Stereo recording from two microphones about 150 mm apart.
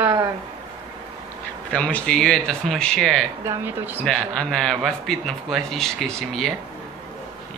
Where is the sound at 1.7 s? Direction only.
5° left (ahead or behind).